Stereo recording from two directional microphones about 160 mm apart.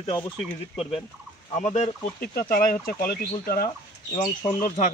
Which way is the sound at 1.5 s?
50° left (ahead or behind).